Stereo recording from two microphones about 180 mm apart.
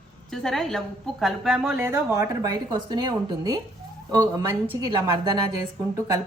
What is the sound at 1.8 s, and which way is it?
A woman's voice, 15° right (ahead or behind).